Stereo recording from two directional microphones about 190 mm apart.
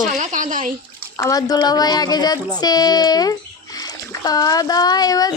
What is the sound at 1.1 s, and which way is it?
Speech, 20° left (ahead or behind).